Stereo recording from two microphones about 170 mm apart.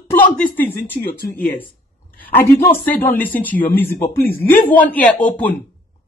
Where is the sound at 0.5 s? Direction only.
10° left (ahead or behind).